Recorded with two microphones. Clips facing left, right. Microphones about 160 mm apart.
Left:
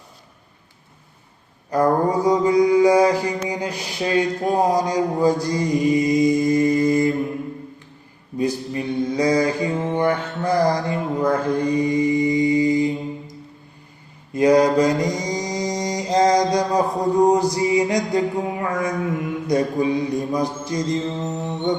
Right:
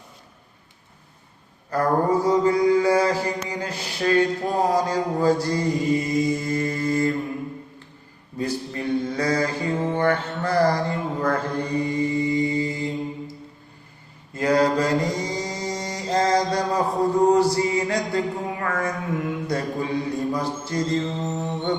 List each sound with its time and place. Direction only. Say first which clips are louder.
1.7 s mantra: left 2 dB; 15° left (ahead or behind)
8.4 s mantra: left 4 dB; 15° left (ahead or behind)
14.3 s mantra: left 5 dB; 15° left (ahead or behind)